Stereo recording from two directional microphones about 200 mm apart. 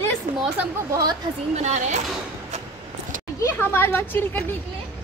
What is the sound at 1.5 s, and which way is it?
Speech, 35° right (ahead or behind).